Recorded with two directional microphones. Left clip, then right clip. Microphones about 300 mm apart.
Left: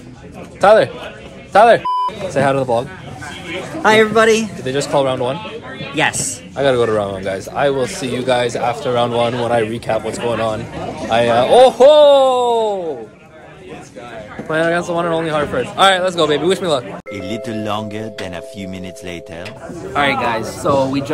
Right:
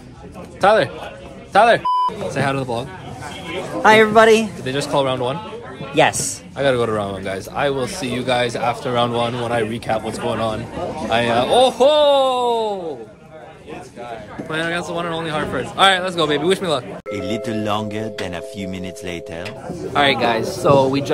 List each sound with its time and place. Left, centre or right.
0.6 s speech: centre
3.8 s a man's voice: centre
4.6 s speech: centre
5.9 s speech: right
6.5 s speech: centre
14.5 s speech: centre